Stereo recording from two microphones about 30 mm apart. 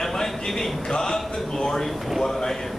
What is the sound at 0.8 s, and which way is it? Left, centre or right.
Speech, left.